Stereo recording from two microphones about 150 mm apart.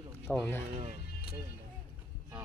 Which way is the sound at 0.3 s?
15° left (ahead or behind).